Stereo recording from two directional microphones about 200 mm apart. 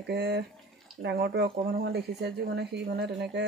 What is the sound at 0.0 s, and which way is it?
Speech, 55° right (ahead or behind).